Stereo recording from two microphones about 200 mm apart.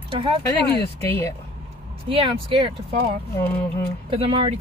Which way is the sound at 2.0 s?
25° right (ahead or behind).